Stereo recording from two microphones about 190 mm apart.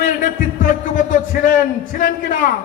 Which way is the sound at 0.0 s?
45° left (ahead or behind).